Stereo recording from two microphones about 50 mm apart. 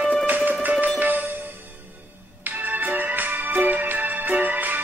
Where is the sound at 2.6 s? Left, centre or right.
Right.